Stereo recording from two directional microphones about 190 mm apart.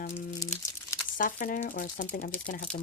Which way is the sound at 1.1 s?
45° left (ahead or behind).